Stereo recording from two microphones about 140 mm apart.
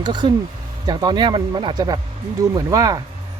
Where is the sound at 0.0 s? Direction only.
30° right (ahead or behind).